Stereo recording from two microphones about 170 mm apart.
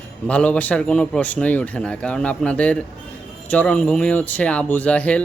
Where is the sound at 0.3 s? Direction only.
5° left (ahead or behind).